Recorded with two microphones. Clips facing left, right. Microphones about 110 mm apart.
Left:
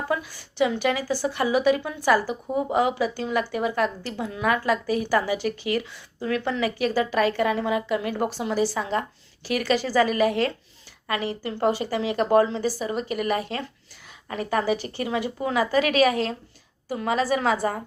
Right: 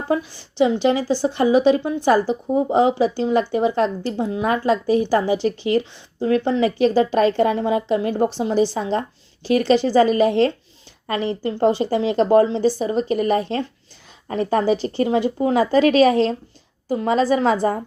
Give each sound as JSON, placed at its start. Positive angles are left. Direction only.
{"t": 0.6, "sound": "a woman's voice", "side_deg": -25}